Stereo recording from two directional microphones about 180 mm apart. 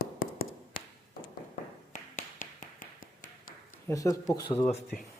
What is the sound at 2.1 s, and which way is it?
Tap, 50° left (ahead or behind).